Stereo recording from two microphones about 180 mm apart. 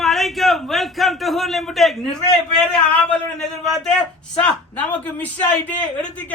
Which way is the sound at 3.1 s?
Centre (ahead or behind).